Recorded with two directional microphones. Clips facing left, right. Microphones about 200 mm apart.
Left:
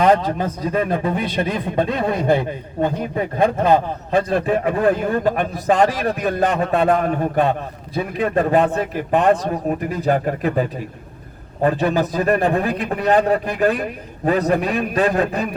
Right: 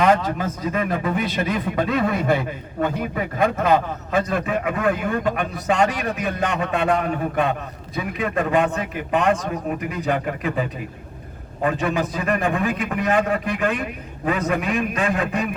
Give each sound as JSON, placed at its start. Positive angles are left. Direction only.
{"t": 0.0, "sound": "a man's voice", "side_deg": 30}